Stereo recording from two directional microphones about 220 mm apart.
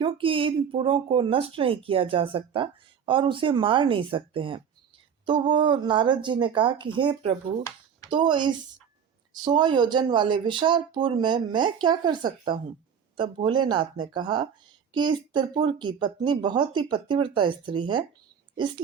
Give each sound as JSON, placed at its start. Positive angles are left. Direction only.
{"t": 0.0, "sound": "speech", "side_deg": -25}